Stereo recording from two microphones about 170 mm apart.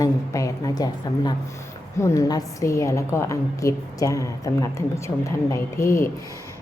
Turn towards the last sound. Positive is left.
turn(degrees=15)  # may be behind; listen again after turning